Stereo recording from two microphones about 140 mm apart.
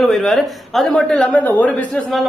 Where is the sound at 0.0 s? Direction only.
Centre (ahead or behind).